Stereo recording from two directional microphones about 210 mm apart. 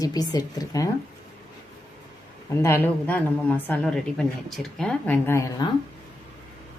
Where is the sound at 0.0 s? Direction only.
15° left (ahead or behind).